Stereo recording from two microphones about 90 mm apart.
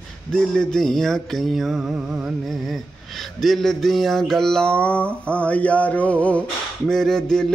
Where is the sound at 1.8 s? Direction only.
15° right (ahead or behind).